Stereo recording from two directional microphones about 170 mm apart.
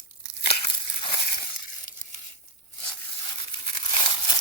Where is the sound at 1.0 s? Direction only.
30° left (ahead or behind).